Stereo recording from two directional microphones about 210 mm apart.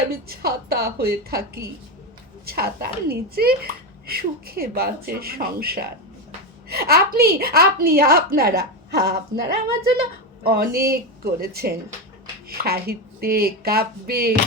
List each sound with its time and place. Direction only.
0.1 s a child's voice: 50° right (ahead or behind)